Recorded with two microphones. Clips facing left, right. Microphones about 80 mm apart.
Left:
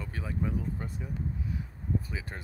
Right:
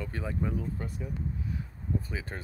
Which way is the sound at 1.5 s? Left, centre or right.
Centre.